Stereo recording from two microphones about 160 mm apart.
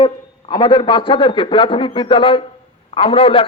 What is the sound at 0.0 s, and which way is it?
A man's voice, 30° left (ahead or behind).